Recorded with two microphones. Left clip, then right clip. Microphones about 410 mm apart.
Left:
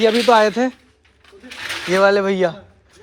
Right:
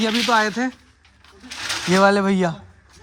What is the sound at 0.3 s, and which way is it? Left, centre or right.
Speech, left.